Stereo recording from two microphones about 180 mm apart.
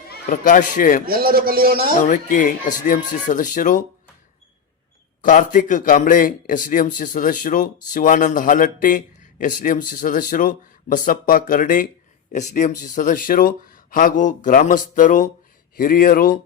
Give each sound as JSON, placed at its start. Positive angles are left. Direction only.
{"t": 0.1, "sound": "a man's voice", "side_deg": 45}
{"t": 1.0, "sound": "speech", "side_deg": -55}
{"t": 2.0, "sound": "a man's voice", "side_deg": 50}
{"t": 5.2, "sound": "a man's voice", "side_deg": 45}